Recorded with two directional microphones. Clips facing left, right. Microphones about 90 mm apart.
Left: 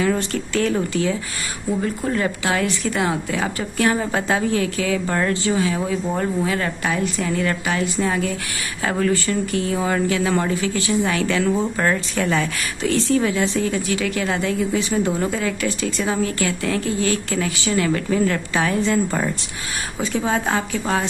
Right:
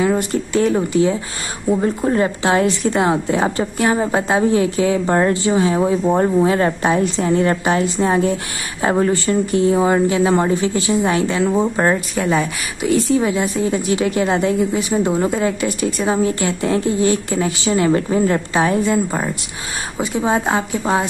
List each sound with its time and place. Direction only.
0.0 s a woman's voice: 20° right (ahead or behind)